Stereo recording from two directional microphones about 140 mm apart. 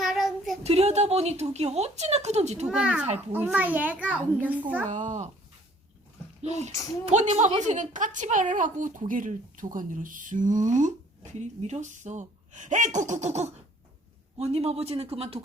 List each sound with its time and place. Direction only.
0.0 s child singing: centre (ahead or behind)
0.6 s a woman's voice: 50° right (ahead or behind)
2.6 s a child's voice: 5° right (ahead or behind)
4.9 s a woman's voice: 60° right (ahead or behind)
6.4 s a woman's voice: 55° right (ahead or behind)